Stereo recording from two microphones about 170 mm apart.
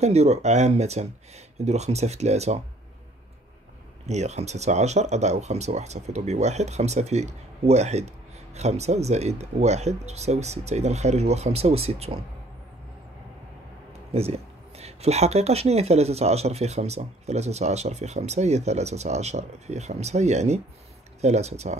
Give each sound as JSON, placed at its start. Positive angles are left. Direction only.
{"t": 0.0, "sound": "speech", "side_deg": -40}
{"t": 4.0, "sound": "speech", "side_deg": -40}
{"t": 13.9, "sound": "speech", "side_deg": -35}